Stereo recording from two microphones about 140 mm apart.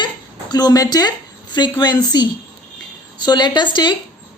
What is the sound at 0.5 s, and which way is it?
A woman's voice, 30° left (ahead or behind).